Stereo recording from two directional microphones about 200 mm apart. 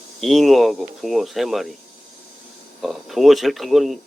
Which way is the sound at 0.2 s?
Centre (ahead or behind).